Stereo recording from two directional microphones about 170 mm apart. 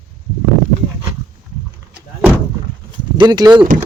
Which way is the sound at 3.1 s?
25° right (ahead or behind).